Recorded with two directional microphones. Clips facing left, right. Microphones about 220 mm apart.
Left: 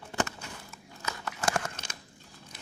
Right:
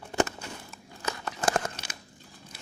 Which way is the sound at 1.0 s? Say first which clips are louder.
Right 3 dB; 30° right (ahead or behind).